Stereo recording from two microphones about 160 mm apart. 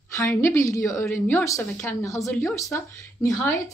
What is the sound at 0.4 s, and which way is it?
Speech, 20° left (ahead or behind).